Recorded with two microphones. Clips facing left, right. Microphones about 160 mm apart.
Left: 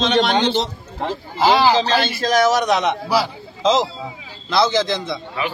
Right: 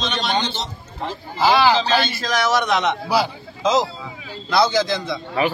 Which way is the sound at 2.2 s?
35° left (ahead or behind).